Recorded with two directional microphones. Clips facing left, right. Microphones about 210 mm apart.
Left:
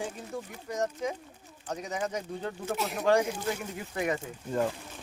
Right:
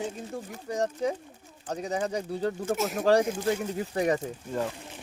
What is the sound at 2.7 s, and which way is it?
Speech, 45° right (ahead or behind).